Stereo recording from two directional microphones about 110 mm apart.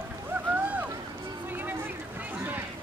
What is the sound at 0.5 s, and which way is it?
Boat, 15° right (ahead or behind).